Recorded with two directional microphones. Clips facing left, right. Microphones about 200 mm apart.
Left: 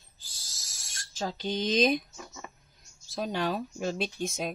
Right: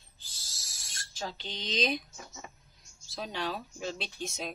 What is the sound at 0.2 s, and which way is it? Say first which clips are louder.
Owl: left 1 dB; 45° left (ahead or behind).